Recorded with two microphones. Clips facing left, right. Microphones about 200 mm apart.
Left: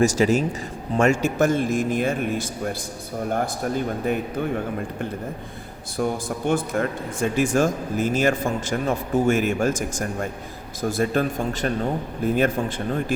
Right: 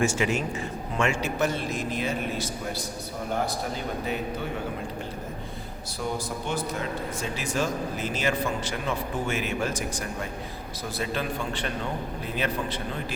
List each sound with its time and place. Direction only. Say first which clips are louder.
0.0 s a man's voice: left 7 dB; 40° left (ahead or behind)
6.0 s a man's voice: left 7 dB; 50° left (ahead or behind)